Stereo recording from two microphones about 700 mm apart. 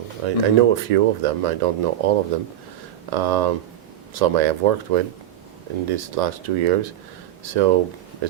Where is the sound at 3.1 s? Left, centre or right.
Right.